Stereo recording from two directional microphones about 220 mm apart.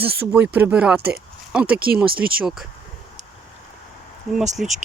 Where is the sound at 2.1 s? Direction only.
45° right (ahead or behind).